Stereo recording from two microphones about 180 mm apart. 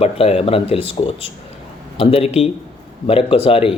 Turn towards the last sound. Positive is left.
turn(degrees=30)  # may be behind; listen again after turning